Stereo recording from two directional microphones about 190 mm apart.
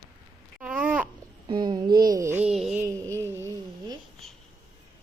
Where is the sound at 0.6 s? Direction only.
5° right (ahead or behind).